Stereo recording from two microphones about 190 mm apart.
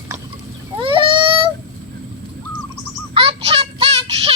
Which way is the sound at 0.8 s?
25° right (ahead or behind).